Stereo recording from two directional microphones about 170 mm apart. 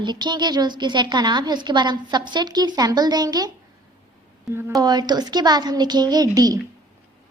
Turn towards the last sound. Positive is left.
turn(degrees=-20)  # may be behind; listen again after turning